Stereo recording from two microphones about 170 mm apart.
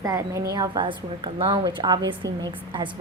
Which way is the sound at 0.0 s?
20° right (ahead or behind).